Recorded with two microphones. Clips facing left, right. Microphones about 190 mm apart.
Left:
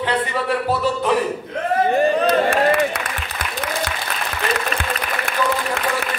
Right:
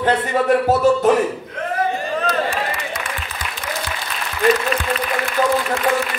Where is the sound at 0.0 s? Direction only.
45° right (ahead or behind).